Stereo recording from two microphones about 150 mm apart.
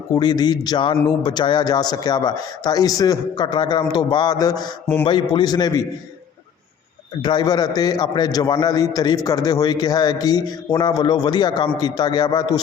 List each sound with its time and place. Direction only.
0.1 s a man's voice: 25° left (ahead or behind)
7.2 s a man's voice: 30° left (ahead or behind)